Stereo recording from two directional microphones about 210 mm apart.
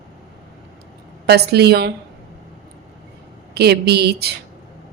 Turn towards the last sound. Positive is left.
turn(degrees=-50)  # may be behind; listen again after turning